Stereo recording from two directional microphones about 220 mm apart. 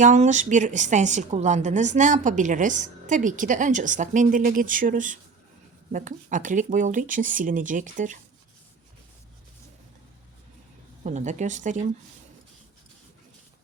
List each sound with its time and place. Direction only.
0.0 s a woman's voice: 35° right (ahead or behind)
11.0 s a woman's voice: 35° right (ahead or behind)